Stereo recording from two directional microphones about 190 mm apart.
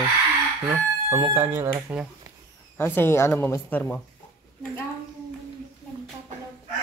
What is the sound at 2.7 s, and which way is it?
Speech, 10° left (ahead or behind).